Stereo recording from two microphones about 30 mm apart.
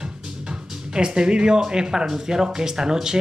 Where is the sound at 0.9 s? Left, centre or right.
Right.